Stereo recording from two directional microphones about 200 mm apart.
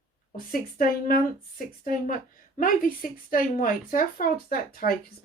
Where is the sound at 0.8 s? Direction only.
45° left (ahead or behind).